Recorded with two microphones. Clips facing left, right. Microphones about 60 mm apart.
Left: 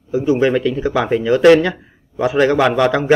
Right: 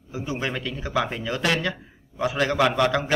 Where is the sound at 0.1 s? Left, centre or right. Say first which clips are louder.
Left 14 dB; centre.